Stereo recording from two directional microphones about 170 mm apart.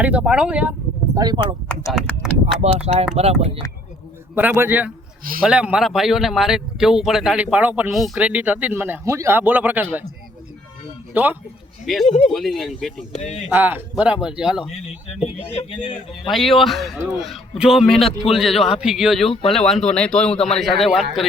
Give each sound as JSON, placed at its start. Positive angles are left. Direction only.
{"t": 0.0, "sound": "speech", "side_deg": -5}
{"t": 1.1, "sound": "speech", "side_deg": -25}
{"t": 1.9, "sound": "speech", "side_deg": 0}
{"t": 2.6, "sound": "speech", "side_deg": -40}
{"t": 4.4, "sound": "speech", "side_deg": -10}
{"t": 11.1, "sound": "speech", "side_deg": -10}
{"t": 11.9, "sound": "speech", "side_deg": 0}
{"t": 13.0, "sound": "speech", "side_deg": 45}
{"t": 13.5, "sound": "speech", "side_deg": -10}
{"t": 15.4, "sound": "speech", "side_deg": 35}
{"t": 16.3, "sound": "speech", "side_deg": 0}
{"t": 19.3, "sound": "speech", "side_deg": 35}
{"t": 19.5, "sound": "speech", "side_deg": 0}